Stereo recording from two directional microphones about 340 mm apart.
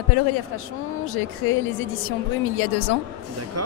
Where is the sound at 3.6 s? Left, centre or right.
Right.